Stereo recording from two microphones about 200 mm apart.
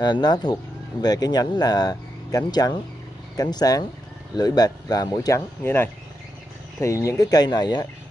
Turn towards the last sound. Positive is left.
turn(degrees=20)  # may be behind; listen again after turning